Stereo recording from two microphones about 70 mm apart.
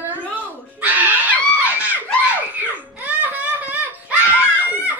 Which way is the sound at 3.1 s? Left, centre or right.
Right.